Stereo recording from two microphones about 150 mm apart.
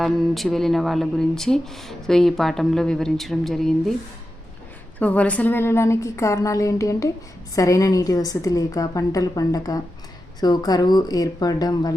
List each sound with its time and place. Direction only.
0.0 s speech: centre (ahead or behind)
4.9 s a woman's voice: 10° left (ahead or behind); by 11.9 s 25° left (ahead or behind)